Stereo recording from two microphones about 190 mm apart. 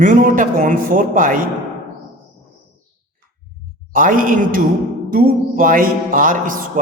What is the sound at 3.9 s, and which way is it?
A man's voice, 45° right (ahead or behind).